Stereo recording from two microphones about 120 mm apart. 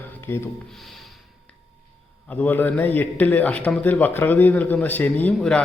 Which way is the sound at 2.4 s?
15° left (ahead or behind).